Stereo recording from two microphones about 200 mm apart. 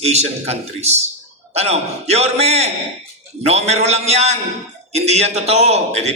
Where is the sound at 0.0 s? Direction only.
30° right (ahead or behind).